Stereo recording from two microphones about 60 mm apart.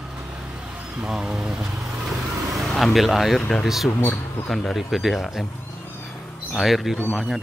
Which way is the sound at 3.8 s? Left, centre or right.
Left.